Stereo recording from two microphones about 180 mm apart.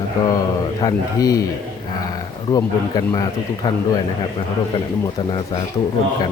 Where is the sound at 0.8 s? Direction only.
20° left (ahead or behind).